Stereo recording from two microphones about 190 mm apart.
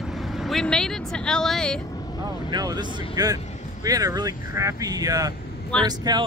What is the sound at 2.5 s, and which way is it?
Speech, 20° right (ahead or behind).